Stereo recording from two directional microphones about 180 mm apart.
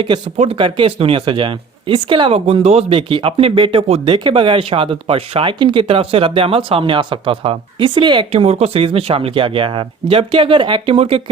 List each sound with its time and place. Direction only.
0.3 s speech: 30° right (ahead or behind)